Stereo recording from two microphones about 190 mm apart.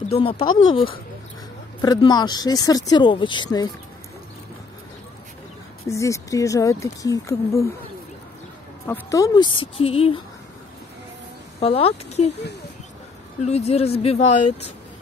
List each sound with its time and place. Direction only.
0.1 s speech: 30° left (ahead or behind)
5.9 s speech: 15° left (ahead or behind)
8.8 s speech: 15° left (ahead or behind); by 10.1 s 30° left (ahead or behind)
11.6 s speech: 30° left (ahead or behind)
12.3 s speech: 65° left (ahead or behind)
13.4 s speech: 35° left (ahead or behind)